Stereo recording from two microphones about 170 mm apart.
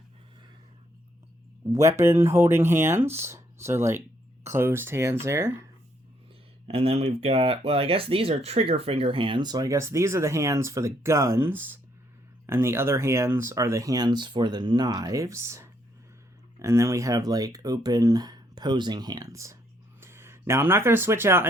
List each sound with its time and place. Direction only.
1.7 s speech: 20° right (ahead or behind)
6.7 s speech: 35° right (ahead or behind); by 21.5 s 15° right (ahead or behind)